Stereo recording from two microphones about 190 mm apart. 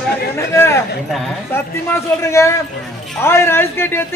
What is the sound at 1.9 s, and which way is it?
A man's voice, 15° left (ahead or behind).